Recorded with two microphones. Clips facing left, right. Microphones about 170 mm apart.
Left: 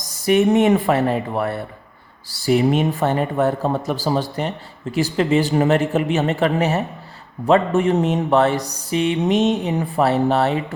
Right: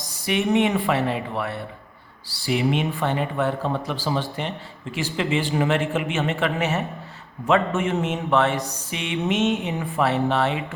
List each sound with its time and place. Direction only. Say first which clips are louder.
0.1 s speech: left 6 dB; 45° left (ahead or behind)